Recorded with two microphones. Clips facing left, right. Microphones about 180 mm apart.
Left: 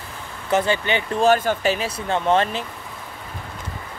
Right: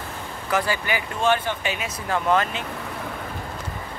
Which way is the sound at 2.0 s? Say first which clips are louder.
Left 2 dB; 25° left (ahead or behind).